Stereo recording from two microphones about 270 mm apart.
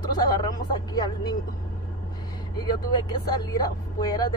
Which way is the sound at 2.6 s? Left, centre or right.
Centre.